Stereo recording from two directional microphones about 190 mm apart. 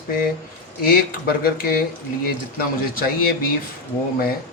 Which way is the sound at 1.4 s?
50° left (ahead or behind).